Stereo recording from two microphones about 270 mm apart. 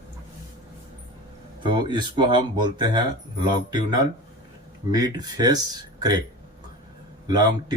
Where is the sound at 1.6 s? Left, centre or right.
Centre.